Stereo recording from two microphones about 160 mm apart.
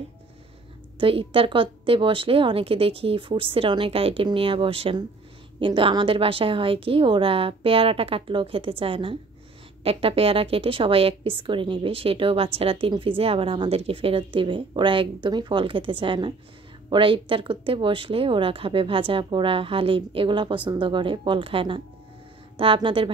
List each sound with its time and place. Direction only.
0.9 s speech: 35° right (ahead or behind)